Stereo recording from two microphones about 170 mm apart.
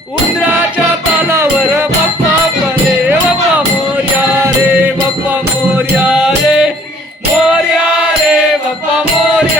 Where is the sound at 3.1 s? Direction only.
10° right (ahead or behind).